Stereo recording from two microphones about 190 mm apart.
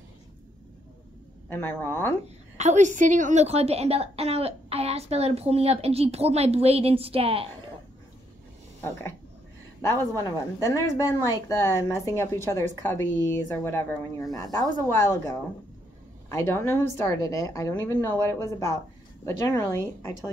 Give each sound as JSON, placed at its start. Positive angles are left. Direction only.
{"t": 1.5, "sound": "a woman's voice", "side_deg": 10}
{"t": 2.5, "sound": "a woman's voice", "side_deg": -40}
{"t": 9.8, "sound": "a woman's voice", "side_deg": 15}